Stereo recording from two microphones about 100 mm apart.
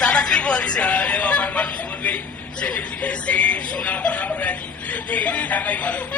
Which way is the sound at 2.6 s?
15° left (ahead or behind).